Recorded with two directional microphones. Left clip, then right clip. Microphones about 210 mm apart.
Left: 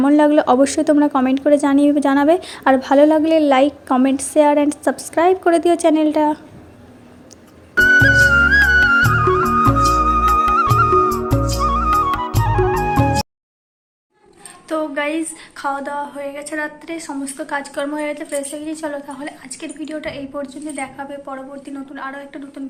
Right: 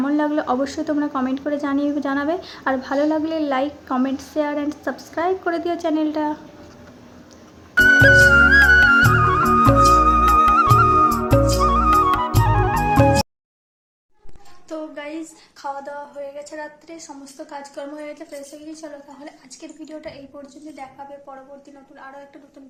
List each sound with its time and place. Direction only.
0.0 s a woman's voice: 35° left (ahead or behind)
7.8 s music: centre (ahead or behind)
14.7 s a woman's voice: 5° right (ahead or behind)
21.9 s a woman's voice: 5° right (ahead or behind)